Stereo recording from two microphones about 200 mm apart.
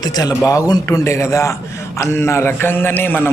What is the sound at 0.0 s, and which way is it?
A man's voice, 20° left (ahead or behind).